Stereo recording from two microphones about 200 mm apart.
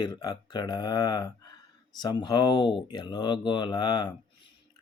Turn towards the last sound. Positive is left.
turn(degrees=20)  # may be behind; listen again after turning